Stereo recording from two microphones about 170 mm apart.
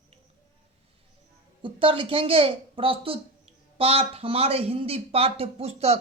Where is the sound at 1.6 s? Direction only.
30° right (ahead or behind).